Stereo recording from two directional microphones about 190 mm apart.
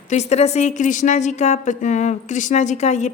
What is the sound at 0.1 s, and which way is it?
A woman's voice, 35° left (ahead or behind).